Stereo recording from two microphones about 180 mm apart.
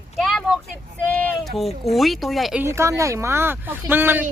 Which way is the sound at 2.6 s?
15° right (ahead or behind).